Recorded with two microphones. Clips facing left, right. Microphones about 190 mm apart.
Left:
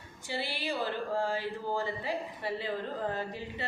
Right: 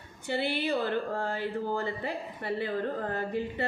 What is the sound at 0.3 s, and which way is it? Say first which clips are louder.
Speech: right 6 dB; 55° right (ahead or behind).